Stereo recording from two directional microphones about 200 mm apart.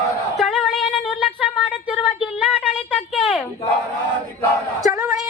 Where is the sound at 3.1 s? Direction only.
Centre (ahead or behind).